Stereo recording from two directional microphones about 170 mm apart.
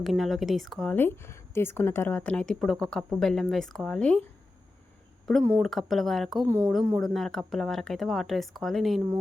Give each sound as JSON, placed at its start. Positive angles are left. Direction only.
{"t": 0.0, "sound": "speech", "side_deg": 0}
{"t": 5.4, "sound": "speech", "side_deg": -15}
{"t": 5.6, "sound": "speech", "side_deg": 0}
{"t": 6.4, "sound": "speech", "side_deg": -15}
{"t": 7.0, "sound": "speech", "side_deg": 0}